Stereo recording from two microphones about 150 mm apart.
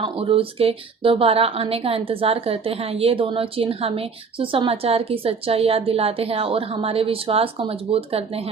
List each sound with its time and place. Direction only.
0.0 s speech: 40° right (ahead or behind)